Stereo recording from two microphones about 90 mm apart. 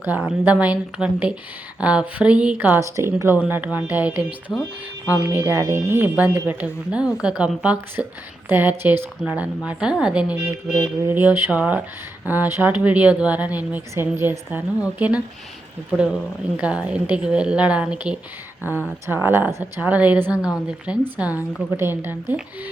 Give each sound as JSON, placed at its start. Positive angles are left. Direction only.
{"t": 0.2, "sound": "speech", "side_deg": -10}
{"t": 2.8, "sound": "speech", "side_deg": -35}
{"t": 3.5, "sound": "a woman's voice", "side_deg": -20}
{"t": 10.8, "sound": "a woman's voice", "side_deg": -25}
{"t": 16.6, "sound": "speech", "side_deg": -15}
{"t": 18.6, "sound": "a woman's voice", "side_deg": -20}